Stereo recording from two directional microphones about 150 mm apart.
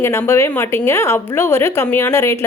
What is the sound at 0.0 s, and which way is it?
A woman's voice, 15° left (ahead or behind).